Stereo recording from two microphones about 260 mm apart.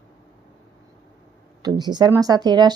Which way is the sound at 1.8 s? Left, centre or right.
Centre.